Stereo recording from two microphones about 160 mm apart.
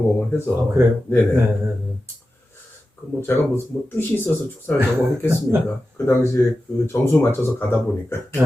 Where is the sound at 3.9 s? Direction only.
15° left (ahead or behind).